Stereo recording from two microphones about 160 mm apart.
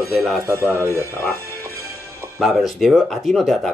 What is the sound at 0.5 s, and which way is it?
Speech, 15° right (ahead or behind).